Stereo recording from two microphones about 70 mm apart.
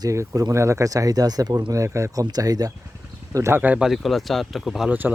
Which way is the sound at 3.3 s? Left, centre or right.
Right.